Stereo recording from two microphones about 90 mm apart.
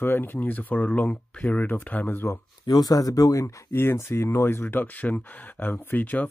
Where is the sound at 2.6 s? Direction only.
45° left (ahead or behind).